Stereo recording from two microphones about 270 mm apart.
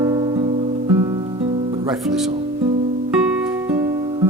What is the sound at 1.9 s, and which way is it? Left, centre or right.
Speech, centre.